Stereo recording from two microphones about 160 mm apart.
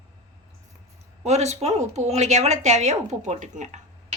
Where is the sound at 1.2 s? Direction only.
45° right (ahead or behind).